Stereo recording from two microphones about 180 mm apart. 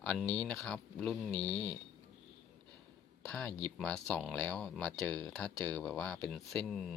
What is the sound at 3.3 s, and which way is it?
Speech, 5° left (ahead or behind).